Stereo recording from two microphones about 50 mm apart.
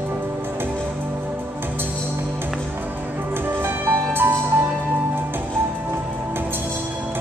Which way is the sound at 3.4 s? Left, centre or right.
Right.